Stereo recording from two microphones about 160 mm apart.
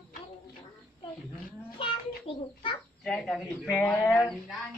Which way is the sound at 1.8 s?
30° left (ahead or behind).